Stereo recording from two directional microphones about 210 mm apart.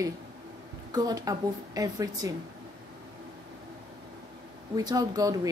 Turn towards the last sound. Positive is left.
turn(degrees=-15)  # may be behind; listen again after turning